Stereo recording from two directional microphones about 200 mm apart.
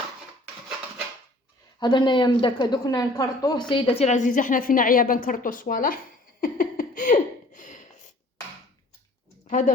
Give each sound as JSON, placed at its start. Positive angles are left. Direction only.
{"t": 1.8, "sound": "speech", "side_deg": 20}
{"t": 6.4, "sound": "a sound", "side_deg": 45}
{"t": 9.5, "sound": "speech", "side_deg": 40}